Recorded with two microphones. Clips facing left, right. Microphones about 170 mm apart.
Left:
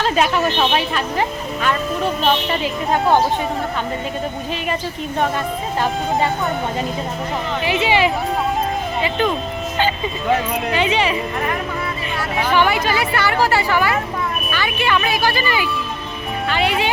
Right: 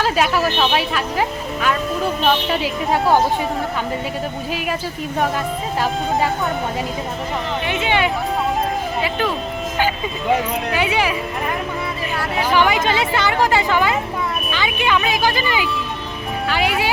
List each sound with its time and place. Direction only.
0.0 s speech: 5° right (ahead or behind)
5.8 s speech: centre (ahead or behind)
7.6 s speech: 5° left (ahead or behind)
12.4 s speech: 10° right (ahead or behind)